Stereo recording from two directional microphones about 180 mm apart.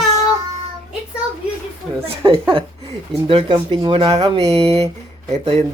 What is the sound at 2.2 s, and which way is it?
Speech, 25° right (ahead or behind).